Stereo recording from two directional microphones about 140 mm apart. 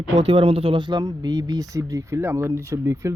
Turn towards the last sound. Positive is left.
turn(degrees=-20)  # may be behind; listen again after turning